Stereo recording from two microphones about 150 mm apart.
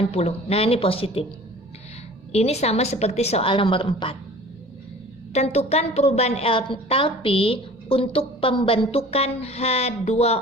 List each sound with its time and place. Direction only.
0.1 s speech: 45° left (ahead or behind)
2.3 s a woman's voice: 45° left (ahead or behind)
5.3 s a woman's voice: 45° left (ahead or behind)